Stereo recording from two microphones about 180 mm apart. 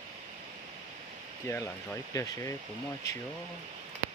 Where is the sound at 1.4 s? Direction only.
15° left (ahead or behind).